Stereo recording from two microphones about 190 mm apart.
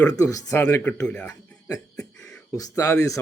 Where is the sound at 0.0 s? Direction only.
20° left (ahead or behind).